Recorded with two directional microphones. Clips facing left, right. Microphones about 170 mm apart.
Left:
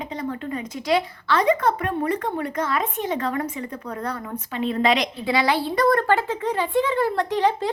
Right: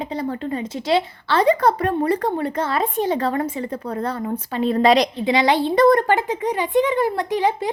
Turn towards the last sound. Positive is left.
turn(degrees=-10)  # may be behind; listen again after turning